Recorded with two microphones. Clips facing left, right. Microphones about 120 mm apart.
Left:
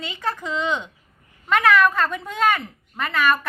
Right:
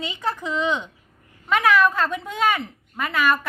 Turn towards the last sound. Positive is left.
turn(degrees=-5)  # may be behind; listen again after turning